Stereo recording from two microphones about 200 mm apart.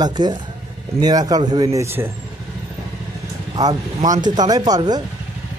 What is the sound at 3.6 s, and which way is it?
A man's voice, 20° right (ahead or behind).